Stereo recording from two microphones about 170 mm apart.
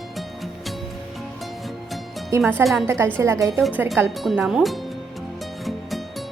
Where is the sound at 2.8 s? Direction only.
15° right (ahead or behind).